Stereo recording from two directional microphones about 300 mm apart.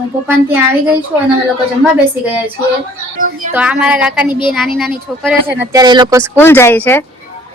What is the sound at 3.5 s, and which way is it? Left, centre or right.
Speech, centre.